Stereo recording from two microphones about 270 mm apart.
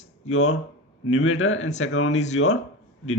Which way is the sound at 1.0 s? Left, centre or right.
Left.